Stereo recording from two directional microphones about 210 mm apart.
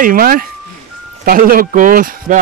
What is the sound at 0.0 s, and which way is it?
Speech, 40° right (ahead or behind).